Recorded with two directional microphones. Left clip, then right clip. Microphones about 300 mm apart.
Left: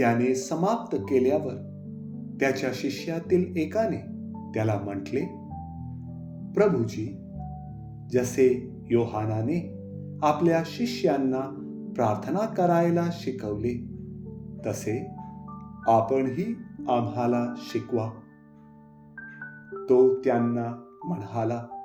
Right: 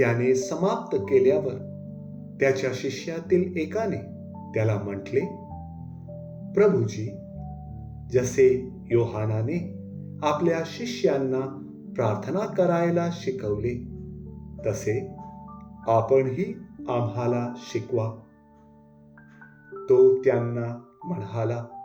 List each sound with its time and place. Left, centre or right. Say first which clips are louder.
0.0 s speech: right 2 dB; left
6.5 s speech: right 2 dB; left
8.1 s speech: right 3 dB; left
19.8 s speech: right 3 dB; left